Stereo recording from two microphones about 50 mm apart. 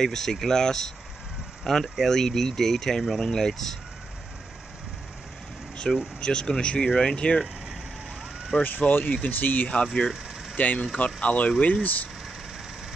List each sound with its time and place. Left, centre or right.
0.0 s speech: centre
5.9 s speech: centre
8.6 s speech: left
9.8 s speech: centre
10.5 s speech: left